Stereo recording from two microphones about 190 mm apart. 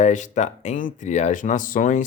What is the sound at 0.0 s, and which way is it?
Speech, 40° left (ahead or behind).